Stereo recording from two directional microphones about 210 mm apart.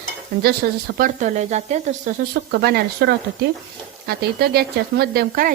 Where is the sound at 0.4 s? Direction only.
45° right (ahead or behind).